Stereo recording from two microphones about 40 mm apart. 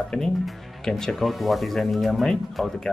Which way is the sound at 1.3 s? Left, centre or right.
Centre.